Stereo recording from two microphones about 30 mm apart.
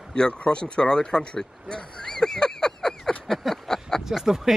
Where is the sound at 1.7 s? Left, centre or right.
Left.